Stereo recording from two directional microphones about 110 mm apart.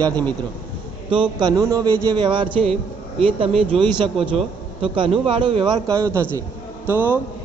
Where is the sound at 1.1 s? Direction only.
45° right (ahead or behind).